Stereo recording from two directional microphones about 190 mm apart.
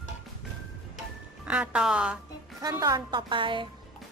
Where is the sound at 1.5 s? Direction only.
5° right (ahead or behind).